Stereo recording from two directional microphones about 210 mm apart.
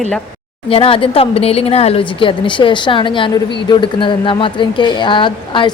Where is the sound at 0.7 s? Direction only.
25° left (ahead or behind).